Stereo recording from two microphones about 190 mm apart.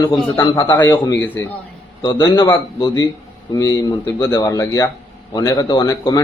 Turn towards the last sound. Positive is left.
turn(degrees=20)  # may be behind; listen again after turning